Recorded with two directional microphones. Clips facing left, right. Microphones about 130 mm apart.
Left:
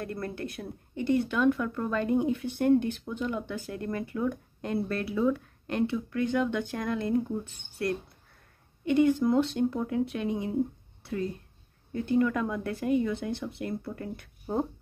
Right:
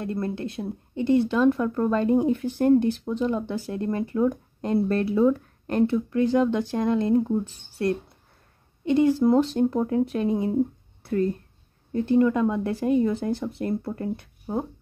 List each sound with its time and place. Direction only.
0.0 s speech: 25° right (ahead or behind)
8.8 s speech: 30° right (ahead or behind)
11.0 s a sound: 50° right (ahead or behind)
11.9 s speech: 30° right (ahead or behind)
14.4 s speech: 10° right (ahead or behind)